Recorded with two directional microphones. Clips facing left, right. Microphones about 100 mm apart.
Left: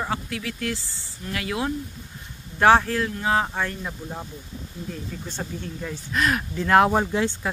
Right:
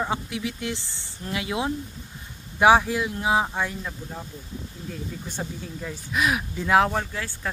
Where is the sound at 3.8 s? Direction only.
15° left (ahead or behind).